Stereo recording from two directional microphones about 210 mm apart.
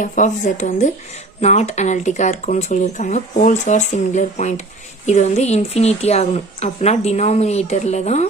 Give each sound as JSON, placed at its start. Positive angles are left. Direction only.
{"t": 0.0, "sound": "speech", "side_deg": 35}